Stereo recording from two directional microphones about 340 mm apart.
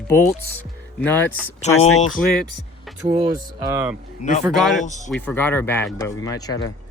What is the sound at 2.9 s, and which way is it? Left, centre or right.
Speech, centre.